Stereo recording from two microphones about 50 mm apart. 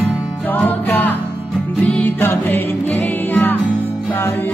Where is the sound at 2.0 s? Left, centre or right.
Left.